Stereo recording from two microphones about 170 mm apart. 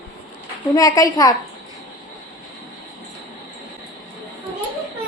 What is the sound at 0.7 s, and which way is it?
Speech, 20° left (ahead or behind).